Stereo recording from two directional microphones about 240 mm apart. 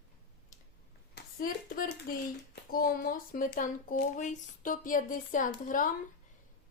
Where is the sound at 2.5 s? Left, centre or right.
Left.